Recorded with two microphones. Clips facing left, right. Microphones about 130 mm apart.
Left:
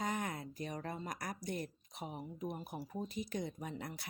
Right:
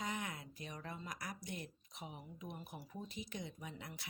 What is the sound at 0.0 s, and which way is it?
Speech, 45° left (ahead or behind).